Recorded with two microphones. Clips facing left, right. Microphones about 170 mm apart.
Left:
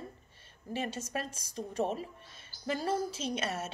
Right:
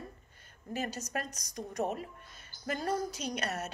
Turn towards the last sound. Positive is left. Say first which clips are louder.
# left 1 dB
turn(degrees=25)  # may be behind; listen again after turning